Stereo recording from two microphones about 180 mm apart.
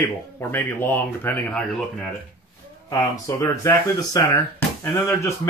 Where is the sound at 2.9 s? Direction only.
15° left (ahead or behind).